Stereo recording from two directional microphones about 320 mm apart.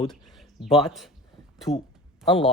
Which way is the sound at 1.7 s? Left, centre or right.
Left.